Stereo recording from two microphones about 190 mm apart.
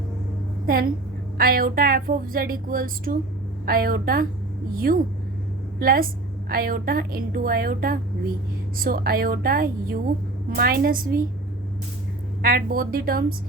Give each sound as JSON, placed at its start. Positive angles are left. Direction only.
{"t": 0.7, "sound": "speech", "side_deg": -50}
{"t": 12.4, "sound": "speech", "side_deg": -50}